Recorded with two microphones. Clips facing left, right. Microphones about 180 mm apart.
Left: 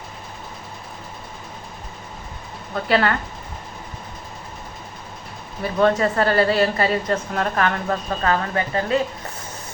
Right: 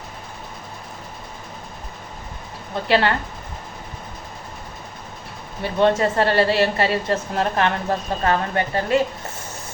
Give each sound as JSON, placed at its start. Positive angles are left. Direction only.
{"t": 2.9, "sound": "a woman's voice", "side_deg": -30}
{"t": 5.6, "sound": "a woman's voice", "side_deg": -25}